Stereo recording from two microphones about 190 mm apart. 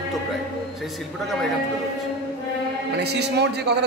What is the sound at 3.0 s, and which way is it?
Speech, 60° right (ahead or behind).